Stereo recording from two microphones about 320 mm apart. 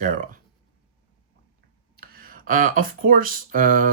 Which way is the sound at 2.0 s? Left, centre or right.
Right.